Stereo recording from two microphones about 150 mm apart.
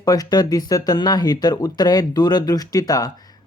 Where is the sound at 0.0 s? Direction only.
25° left (ahead or behind).